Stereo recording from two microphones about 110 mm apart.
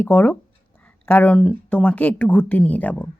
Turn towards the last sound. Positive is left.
turn(degrees=15)  # may be behind; listen again after turning